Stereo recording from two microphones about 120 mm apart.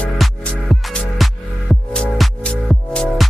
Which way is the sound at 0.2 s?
Centre (ahead or behind).